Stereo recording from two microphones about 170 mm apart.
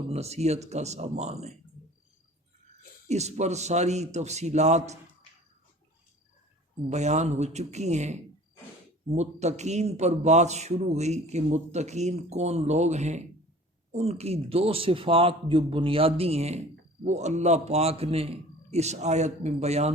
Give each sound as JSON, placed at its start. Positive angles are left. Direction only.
{"t": 0.1, "sound": "a man's voice", "side_deg": -40}
{"t": 3.1, "sound": "a man's voice", "side_deg": -40}
{"t": 6.9, "sound": "a man's voice", "side_deg": -40}